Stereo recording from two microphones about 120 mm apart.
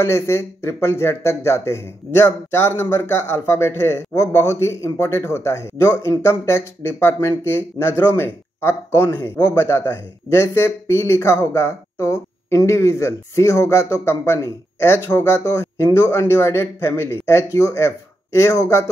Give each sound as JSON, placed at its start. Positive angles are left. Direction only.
{"t": 0.0, "sound": "speech", "side_deg": 20}